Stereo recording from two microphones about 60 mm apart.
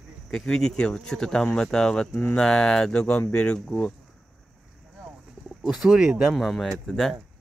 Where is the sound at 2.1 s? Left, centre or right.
Left.